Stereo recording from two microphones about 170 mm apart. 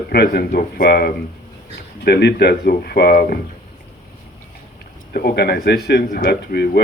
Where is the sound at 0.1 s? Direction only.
65° left (ahead or behind).